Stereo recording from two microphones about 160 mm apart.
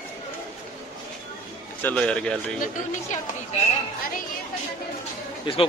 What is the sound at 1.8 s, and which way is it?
Speech, 5° left (ahead or behind).